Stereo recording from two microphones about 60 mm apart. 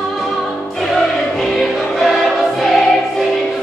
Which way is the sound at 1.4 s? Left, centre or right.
Centre.